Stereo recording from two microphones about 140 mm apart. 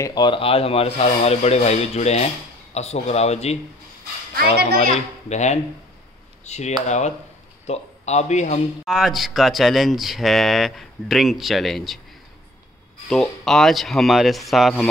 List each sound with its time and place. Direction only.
0.0 s speech: 30° left (ahead or behind); by 8.5 s 55° left (ahead or behind)
8.8 s speech: centre (ahead or behind)
13.5 s speech: centre (ahead or behind)